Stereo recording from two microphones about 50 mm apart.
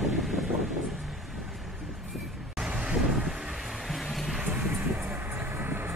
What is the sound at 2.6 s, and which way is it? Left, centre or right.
Vehicle, centre.